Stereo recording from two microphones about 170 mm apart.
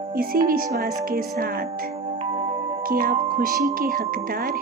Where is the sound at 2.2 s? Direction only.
35° right (ahead or behind).